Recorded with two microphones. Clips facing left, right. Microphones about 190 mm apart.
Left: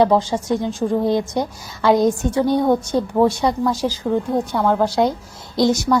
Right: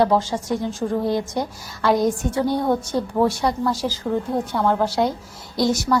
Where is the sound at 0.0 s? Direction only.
20° left (ahead or behind).